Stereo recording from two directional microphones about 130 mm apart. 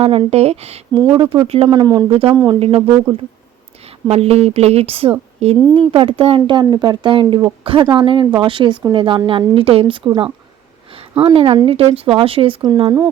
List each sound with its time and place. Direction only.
0.0 s speech: 50° right (ahead or behind)
1.0 s speech: 40° right (ahead or behind)
1.7 s speech: 30° right (ahead or behind)
2.0 s speech: 45° right (ahead or behind)
2.3 s speech: 25° right (ahead or behind)
2.6 s speech: 50° right (ahead or behind)
4.1 s speech: 50° right (ahead or behind)
11.3 s speech: 45° right (ahead or behind)
12.6 s speech: 35° right (ahead or behind)